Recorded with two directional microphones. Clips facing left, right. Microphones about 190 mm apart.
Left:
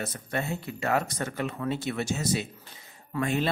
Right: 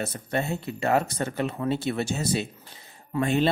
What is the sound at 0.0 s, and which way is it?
Speech, 30° right (ahead or behind).